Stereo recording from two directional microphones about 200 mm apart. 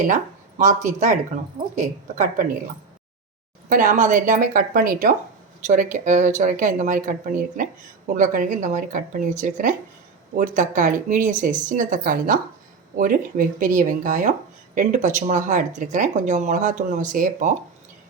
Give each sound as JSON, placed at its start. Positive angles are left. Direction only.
{"t": 0.6, "sound": "speech", "side_deg": -40}
{"t": 3.7, "sound": "speech", "side_deg": -40}